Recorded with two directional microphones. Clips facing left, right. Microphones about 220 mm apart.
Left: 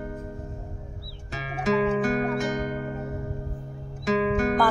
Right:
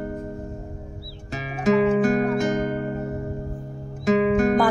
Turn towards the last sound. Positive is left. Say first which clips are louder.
# right 5 dB
turn(degrees=-45)  # may be behind; listen again after turning